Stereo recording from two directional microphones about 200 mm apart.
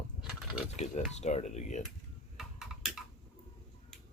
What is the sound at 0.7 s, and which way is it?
Speech, 35° left (ahead or behind).